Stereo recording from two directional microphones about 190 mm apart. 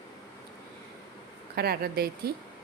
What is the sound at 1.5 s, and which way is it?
Speech, 55° right (ahead or behind).